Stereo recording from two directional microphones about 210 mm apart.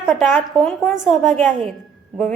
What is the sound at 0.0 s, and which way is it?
A woman's voice, centre (ahead or behind).